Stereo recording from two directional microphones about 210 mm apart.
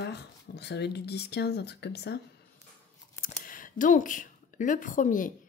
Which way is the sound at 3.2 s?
40° left (ahead or behind).